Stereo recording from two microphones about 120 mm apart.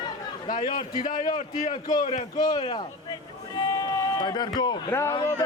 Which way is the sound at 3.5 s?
35° left (ahead or behind).